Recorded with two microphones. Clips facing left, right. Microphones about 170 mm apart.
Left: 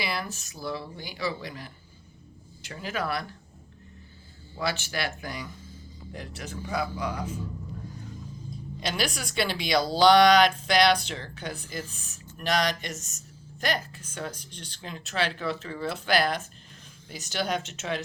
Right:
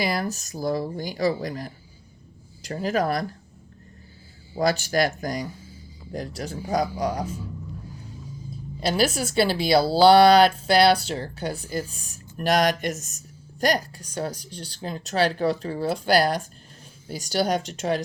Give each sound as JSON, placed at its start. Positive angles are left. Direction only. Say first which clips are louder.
{"t": 0.0, "sound": "speech", "louder": "right 7 dB", "side_deg": -45}
{"t": 4.5, "sound": "speech", "louder": "right 9 dB", "side_deg": -40}
{"t": 8.8, "sound": "speech", "louder": "right 8 dB", "side_deg": -35}
{"t": 12.9, "sound": "a woman's voice", "louder": "right 7 dB", "side_deg": 0}
{"t": 13.6, "sound": "speech", "louder": "right 7 dB", "side_deg": -40}